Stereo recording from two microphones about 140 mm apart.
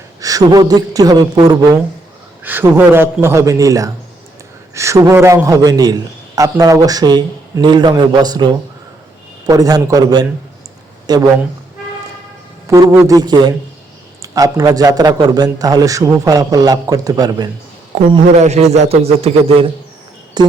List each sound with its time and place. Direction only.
0.2 s a man's voice: 25° right (ahead or behind)
2.4 s a man's voice: 15° right (ahead or behind); by 10.2 s 30° right (ahead or behind)
11.0 s a sound: 30° right (ahead or behind)
12.9 s a man's voice: 20° right (ahead or behind)
18.3 s a man's voice: 50° right (ahead or behind)
20.4 s music: 30° right (ahead or behind)